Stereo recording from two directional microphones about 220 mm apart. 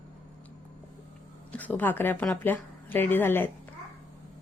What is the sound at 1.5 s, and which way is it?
A woman's voice, 5° left (ahead or behind).